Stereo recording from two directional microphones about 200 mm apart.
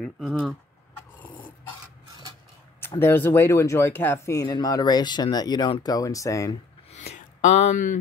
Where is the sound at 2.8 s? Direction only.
10° left (ahead or behind).